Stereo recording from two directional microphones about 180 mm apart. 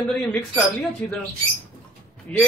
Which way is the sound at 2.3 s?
10° left (ahead or behind).